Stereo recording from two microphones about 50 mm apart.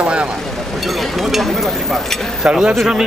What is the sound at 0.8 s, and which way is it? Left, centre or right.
Speech, centre.